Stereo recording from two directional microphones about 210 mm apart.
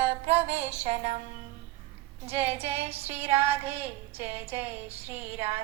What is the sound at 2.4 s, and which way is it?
Music, 10° right (ahead or behind).